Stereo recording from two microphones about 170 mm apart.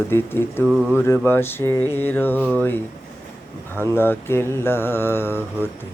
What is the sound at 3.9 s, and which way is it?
Mantra, 15° left (ahead or behind).